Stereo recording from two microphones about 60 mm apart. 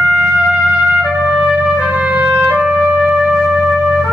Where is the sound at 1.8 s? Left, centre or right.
Centre.